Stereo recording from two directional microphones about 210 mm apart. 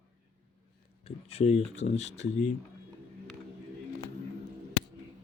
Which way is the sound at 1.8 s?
35° left (ahead or behind).